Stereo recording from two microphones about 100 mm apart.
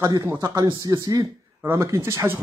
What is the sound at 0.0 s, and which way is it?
Speech, 35° right (ahead or behind).